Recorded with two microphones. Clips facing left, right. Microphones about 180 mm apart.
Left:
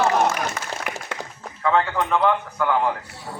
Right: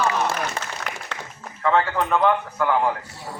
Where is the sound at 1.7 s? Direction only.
5° right (ahead or behind).